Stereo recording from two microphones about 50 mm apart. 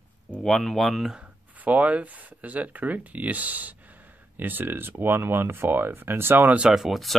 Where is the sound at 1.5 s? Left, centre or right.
Right.